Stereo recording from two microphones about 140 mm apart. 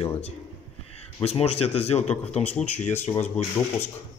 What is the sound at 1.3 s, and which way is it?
Speech, 50° left (ahead or behind).